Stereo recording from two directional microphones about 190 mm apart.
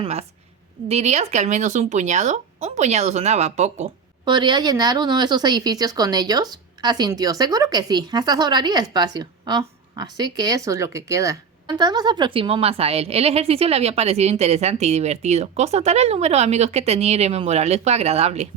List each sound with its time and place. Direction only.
0.0 s speech: 35° right (ahead or behind)
4.3 s a woman's voice: 25° right (ahead or behind)